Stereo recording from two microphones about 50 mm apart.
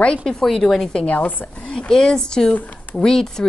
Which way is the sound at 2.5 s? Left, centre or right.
Left.